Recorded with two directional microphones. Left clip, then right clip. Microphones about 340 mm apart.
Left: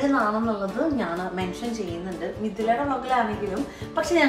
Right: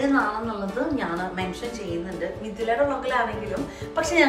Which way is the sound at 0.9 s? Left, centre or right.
Centre.